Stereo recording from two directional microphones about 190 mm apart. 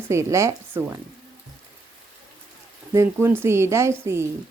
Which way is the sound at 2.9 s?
15° right (ahead or behind).